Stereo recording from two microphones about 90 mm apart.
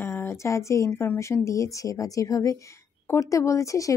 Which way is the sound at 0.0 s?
30° left (ahead or behind).